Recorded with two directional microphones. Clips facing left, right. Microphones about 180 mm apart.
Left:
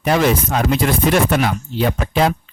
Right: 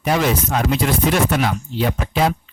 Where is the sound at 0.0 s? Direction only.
55° left (ahead or behind).